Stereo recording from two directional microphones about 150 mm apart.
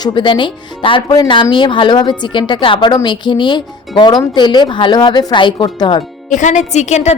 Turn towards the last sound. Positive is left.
turn(degrees=50)  # may be behind; listen again after turning